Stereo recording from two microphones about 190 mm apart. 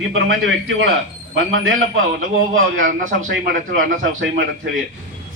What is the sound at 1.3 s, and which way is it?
Speech, 90° right.